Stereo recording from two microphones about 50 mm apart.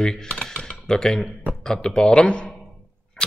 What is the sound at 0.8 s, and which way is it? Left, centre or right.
Speech, centre.